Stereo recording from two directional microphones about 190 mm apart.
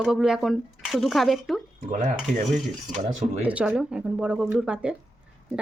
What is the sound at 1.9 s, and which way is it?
Dishes, 40° right (ahead or behind).